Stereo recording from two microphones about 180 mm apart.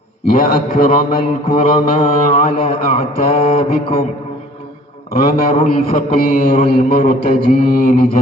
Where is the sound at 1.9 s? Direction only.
40° left (ahead or behind).